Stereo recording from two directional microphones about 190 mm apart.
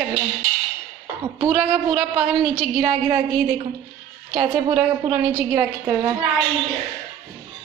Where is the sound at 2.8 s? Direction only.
25° right (ahead or behind).